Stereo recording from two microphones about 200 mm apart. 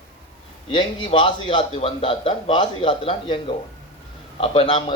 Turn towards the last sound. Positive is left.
turn(degrees=25)  # may be behind; listen again after turning